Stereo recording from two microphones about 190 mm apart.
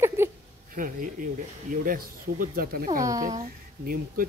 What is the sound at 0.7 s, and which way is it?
Speech, 45° right (ahead or behind).